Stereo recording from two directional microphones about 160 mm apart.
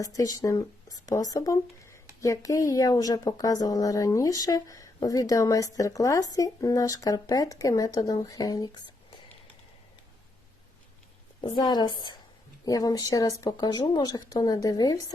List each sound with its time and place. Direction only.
0.0 s speech: 20° left (ahead or behind)
11.3 s speech: 30° left (ahead or behind)